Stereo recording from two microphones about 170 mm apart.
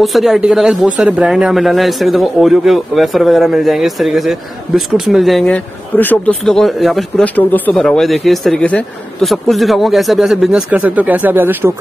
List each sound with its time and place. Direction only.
0.0 s speech: centre (ahead or behind)